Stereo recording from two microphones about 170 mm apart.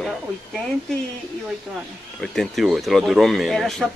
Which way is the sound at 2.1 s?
Centre (ahead or behind).